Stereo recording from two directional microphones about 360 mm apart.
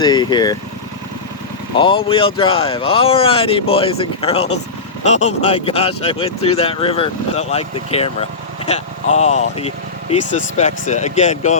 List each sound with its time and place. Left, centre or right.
0.0 s speech: centre
1.7 s speech: centre